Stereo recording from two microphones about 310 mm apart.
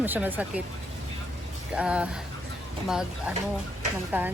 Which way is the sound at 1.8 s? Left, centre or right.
Centre.